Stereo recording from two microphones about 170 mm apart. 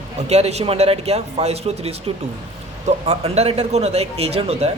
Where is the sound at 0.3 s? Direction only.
40° right (ahead or behind).